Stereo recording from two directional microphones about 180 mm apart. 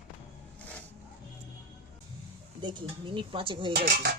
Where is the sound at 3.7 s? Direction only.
65° right (ahead or behind).